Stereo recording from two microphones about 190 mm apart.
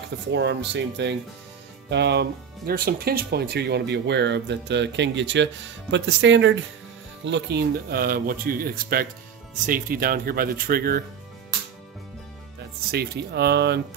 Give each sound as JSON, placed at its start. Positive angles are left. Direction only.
{"t": 0.3, "sound": "speech", "side_deg": -70}
{"t": 12.9, "sound": "speech", "side_deg": -60}